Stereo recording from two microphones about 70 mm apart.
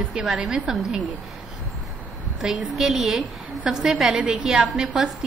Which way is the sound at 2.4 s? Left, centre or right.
Centre.